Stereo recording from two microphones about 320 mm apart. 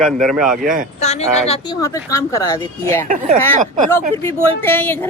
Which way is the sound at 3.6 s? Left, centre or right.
Right.